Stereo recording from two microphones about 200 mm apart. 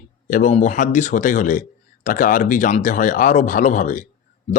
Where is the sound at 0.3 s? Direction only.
40° left (ahead or behind).